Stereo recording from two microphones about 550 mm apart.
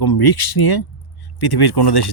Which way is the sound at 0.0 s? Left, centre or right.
Left.